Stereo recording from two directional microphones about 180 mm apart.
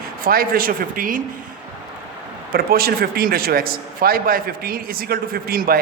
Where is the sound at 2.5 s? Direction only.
55° right (ahead or behind).